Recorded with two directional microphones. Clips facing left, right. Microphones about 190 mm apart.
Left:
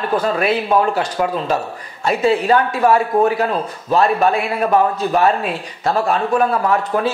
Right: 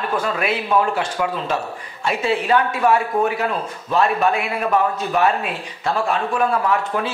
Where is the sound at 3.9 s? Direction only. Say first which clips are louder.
Left 3 dB; 35° left (ahead or behind).